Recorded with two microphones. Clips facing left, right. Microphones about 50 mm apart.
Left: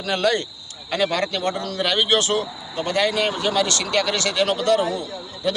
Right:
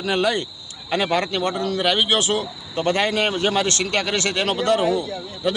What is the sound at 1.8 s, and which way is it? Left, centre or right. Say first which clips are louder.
Speech: left 1 dB; centre.